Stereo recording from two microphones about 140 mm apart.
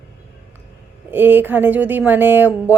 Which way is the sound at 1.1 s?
15° right (ahead or behind).